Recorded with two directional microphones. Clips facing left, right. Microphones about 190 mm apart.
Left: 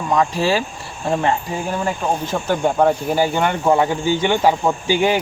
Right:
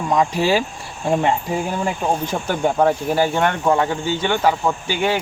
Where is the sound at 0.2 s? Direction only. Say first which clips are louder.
Right 1 dB; 20° right (ahead or behind).